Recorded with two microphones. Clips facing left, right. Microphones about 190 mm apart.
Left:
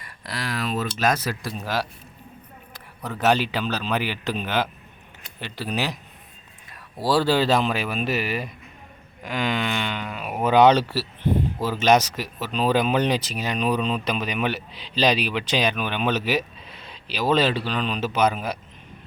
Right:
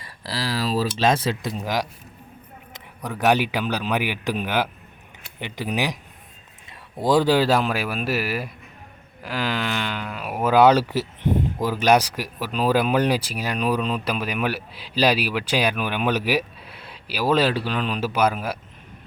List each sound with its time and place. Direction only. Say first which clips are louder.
0.0 s speech: right 3 dB; 30° right (ahead or behind); by 18.5 s 10° right (ahead or behind)